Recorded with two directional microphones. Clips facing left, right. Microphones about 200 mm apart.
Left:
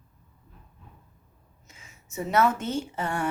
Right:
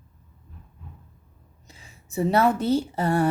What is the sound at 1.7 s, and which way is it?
A woman's voice, 35° right (ahead or behind).